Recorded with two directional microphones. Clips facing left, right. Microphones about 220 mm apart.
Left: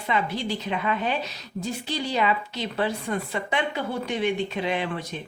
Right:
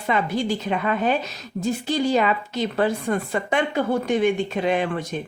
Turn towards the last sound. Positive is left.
turn(degrees=-50)  # may be behind; listen again after turning